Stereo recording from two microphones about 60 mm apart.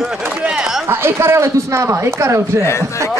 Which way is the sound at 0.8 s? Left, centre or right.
Right.